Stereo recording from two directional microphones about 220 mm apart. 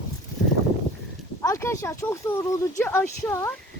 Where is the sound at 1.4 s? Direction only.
15° left (ahead or behind).